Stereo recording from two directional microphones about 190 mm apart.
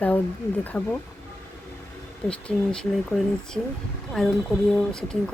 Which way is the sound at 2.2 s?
5° left (ahead or behind).